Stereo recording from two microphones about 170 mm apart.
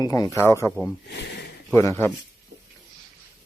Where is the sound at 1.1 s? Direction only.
90° left.